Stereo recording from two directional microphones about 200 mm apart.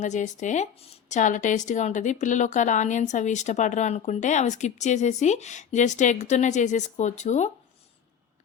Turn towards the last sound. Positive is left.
turn(degrees=35)  # may be behind; listen again after turning